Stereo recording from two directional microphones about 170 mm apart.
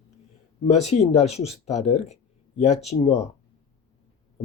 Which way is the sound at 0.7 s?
40° left (ahead or behind).